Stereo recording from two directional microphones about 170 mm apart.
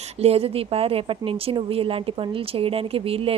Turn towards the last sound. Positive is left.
turn(degrees=-35)  # may be behind; listen again after turning